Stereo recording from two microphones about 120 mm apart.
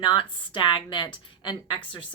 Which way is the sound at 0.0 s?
45° left (ahead or behind).